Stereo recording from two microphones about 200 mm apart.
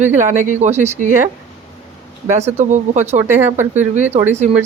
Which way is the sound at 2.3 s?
35° right (ahead or behind).